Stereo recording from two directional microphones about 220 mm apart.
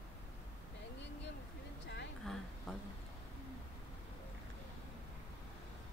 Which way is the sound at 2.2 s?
5° left (ahead or behind).